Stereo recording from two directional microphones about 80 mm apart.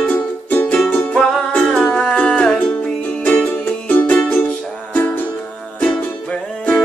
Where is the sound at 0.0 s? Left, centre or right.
Left.